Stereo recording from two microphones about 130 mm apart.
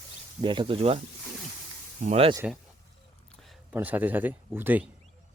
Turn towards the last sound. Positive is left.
turn(degrees=-15)  # may be behind; listen again after turning